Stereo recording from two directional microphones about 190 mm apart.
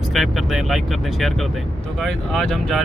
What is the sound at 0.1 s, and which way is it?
Speech, centre (ahead or behind).